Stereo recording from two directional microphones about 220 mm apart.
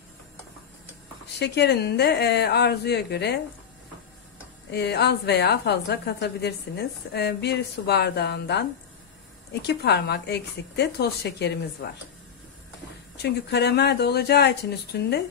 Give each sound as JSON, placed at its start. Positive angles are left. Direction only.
{"t": 1.4, "sound": "a woman's voice", "side_deg": 50}
{"t": 4.6, "sound": "a woman's voice", "side_deg": 50}
{"t": 13.2, "sound": "a woman's voice", "side_deg": 50}